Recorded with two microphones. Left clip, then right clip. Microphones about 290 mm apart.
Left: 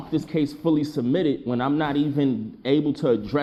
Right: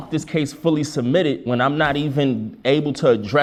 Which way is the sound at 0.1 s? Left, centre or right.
Right.